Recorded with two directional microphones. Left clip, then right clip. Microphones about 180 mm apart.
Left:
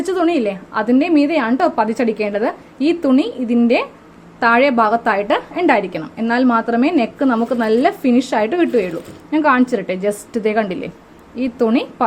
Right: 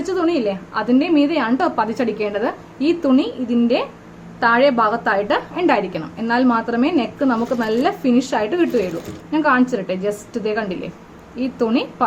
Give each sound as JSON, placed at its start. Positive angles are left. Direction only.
{"t": 0.0, "sound": "a woman's voice", "side_deg": 45}